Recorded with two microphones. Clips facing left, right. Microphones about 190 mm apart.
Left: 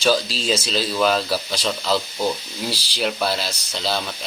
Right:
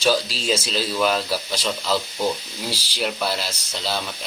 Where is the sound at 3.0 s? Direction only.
10° right (ahead or behind).